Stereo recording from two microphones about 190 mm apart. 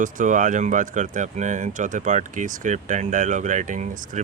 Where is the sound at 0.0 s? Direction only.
45° right (ahead or behind).